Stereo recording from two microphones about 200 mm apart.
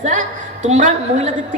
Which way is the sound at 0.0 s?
40° right (ahead or behind).